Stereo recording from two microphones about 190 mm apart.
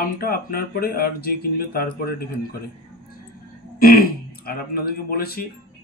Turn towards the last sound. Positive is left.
turn(degrees=55)  # may be behind; listen again after turning